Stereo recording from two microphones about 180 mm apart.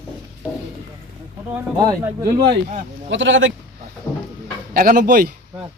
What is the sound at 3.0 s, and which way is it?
Speech, 90° right.